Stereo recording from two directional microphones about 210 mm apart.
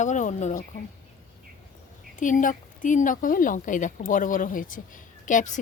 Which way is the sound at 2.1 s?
40° left (ahead or behind).